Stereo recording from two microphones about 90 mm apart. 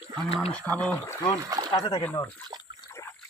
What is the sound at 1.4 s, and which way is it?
Speech, 45° right (ahead or behind).